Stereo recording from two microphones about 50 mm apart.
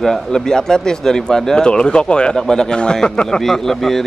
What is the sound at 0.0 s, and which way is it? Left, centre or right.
A man's voice, centre.